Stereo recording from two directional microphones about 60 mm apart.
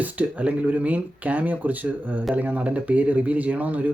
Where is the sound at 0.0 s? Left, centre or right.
Right.